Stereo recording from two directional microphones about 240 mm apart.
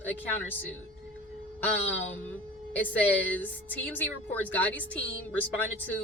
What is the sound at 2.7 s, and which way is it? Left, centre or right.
Speech, centre.